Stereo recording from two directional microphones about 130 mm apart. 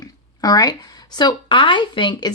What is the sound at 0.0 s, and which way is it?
Speech, 30° left (ahead or behind).